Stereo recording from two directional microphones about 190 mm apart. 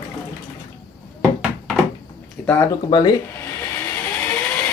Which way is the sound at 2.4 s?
10° left (ahead or behind).